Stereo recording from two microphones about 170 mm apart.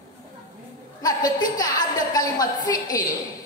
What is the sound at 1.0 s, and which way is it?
A woman's voice, 25° left (ahead or behind).